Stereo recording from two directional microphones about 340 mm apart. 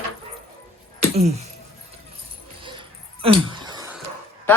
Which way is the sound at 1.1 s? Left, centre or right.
Centre.